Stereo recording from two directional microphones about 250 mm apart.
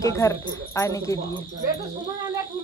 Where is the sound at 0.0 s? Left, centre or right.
Centre.